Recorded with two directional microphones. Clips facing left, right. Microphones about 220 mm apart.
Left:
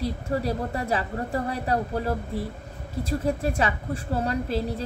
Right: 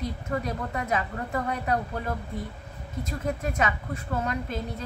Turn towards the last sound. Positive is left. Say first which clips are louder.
# left 5 dB
turn(degrees=35)  # may be behind; listen again after turning